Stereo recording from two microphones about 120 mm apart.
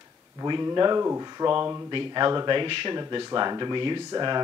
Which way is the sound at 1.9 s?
40° right (ahead or behind).